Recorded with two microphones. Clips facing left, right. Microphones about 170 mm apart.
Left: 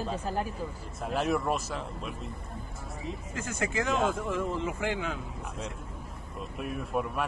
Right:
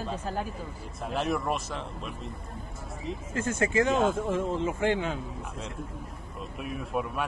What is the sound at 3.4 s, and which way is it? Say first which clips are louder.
Speech: right 6 dB; 25° right (ahead or behind).